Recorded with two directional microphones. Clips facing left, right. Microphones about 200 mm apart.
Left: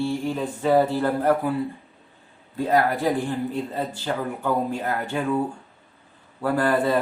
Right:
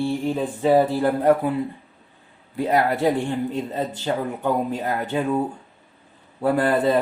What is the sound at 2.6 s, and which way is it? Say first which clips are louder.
Speech: right 1 dB; 20° right (ahead or behind).